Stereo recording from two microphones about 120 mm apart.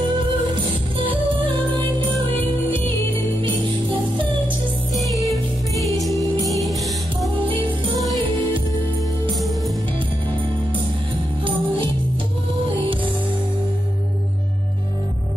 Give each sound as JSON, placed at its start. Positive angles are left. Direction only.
{"t": 0.9, "sound": "music", "side_deg": -50}
{"t": 5.3, "sound": "music", "side_deg": 0}
{"t": 7.4, "sound": "music", "side_deg": -45}